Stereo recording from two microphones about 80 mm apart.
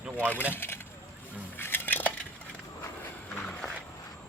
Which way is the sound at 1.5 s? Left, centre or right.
Left.